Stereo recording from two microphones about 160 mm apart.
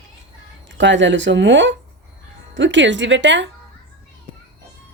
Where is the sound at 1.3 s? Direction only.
90° right.